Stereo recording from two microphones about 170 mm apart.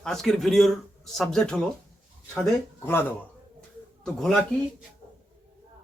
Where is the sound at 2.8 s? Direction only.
15° left (ahead or behind).